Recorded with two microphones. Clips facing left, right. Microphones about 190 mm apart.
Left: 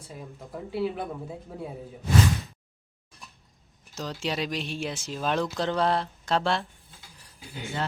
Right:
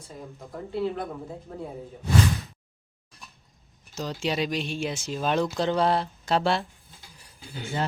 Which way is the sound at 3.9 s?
Centre (ahead or behind).